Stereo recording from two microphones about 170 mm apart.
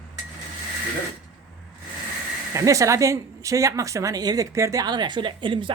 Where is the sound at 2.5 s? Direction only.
20° right (ahead or behind).